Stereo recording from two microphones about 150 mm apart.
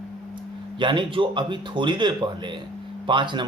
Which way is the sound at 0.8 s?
35° right (ahead or behind).